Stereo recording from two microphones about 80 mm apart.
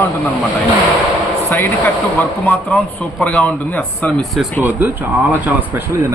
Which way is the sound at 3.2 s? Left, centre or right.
Centre.